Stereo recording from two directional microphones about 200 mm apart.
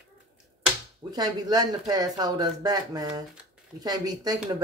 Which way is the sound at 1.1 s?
20° right (ahead or behind).